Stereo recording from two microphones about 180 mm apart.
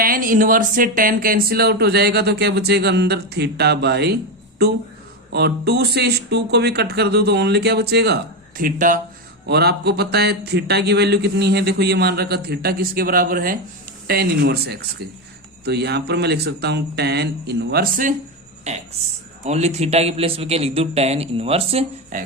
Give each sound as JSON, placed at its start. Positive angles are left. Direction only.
{"t": 0.0, "sound": "speech", "side_deg": -50}
{"t": 5.3, "sound": "speech", "side_deg": -65}
{"t": 9.5, "sound": "speech", "side_deg": -65}
{"t": 18.7, "sound": "a man's voice", "side_deg": -40}
{"t": 22.1, "sound": "music", "side_deg": -45}